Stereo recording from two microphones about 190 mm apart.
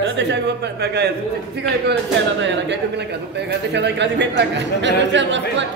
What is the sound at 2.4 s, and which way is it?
A man's voice, 65° right (ahead or behind).